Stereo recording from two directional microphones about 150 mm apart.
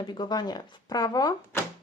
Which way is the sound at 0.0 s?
30° left (ahead or behind).